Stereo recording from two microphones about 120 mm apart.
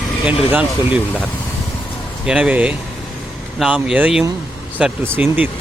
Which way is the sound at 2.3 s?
10° right (ahead or behind).